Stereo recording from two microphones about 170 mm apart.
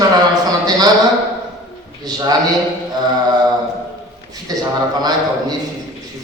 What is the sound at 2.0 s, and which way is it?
Speech, 25° right (ahead or behind).